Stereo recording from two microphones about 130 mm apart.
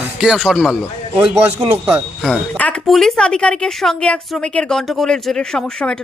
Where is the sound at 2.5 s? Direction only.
10° left (ahead or behind).